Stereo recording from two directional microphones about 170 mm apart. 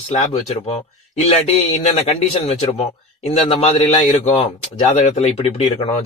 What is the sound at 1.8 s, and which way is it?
Speech, 40° left (ahead or behind).